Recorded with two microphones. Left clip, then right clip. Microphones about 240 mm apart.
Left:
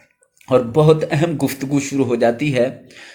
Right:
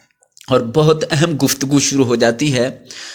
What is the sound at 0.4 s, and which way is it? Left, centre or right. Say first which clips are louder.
A man's voice: even; right.